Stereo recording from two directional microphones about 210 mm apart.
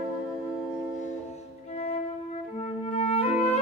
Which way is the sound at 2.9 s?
25° left (ahead or behind).